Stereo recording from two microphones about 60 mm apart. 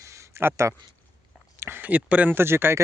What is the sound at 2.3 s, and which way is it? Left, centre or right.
Speech, right.